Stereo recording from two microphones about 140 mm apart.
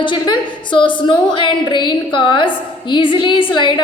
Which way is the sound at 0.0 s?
35° left (ahead or behind).